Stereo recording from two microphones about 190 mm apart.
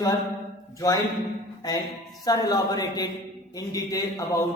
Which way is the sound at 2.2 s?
20° left (ahead or behind).